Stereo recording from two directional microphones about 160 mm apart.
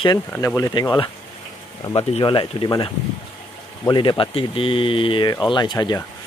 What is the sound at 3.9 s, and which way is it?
Speech, 30° left (ahead or behind).